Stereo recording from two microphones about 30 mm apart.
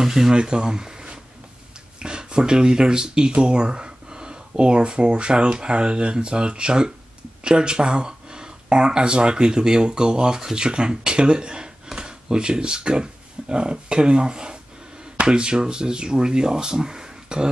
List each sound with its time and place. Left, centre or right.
0.0 s speech: centre
0.4 s speech: right